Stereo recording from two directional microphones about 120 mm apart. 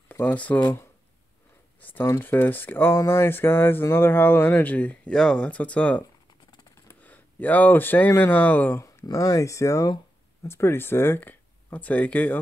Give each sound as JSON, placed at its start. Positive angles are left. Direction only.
{"t": 0.1, "sound": "speech", "side_deg": 15}
{"t": 1.8, "sound": "speech", "side_deg": 15}
{"t": 9.0, "sound": "speech", "side_deg": 25}